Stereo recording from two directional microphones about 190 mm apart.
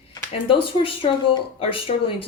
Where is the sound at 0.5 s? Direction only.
30° left (ahead or behind).